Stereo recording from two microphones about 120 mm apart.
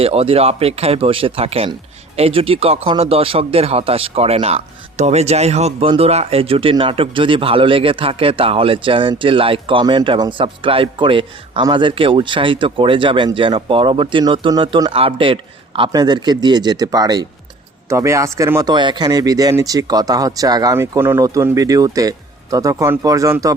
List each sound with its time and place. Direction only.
0.0 s speech: 55° right (ahead or behind)
15.9 s speech: 35° right (ahead or behind)
18.6 s speech: 40° right (ahead or behind)
20.7 s speech: 20° right (ahead or behind)